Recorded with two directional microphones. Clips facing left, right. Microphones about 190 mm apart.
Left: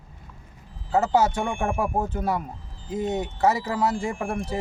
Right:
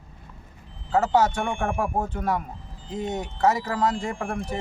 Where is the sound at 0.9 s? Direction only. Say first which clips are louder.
Even; 10° left (ahead or behind).